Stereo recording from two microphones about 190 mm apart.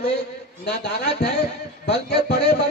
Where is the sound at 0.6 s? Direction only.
60° left (ahead or behind).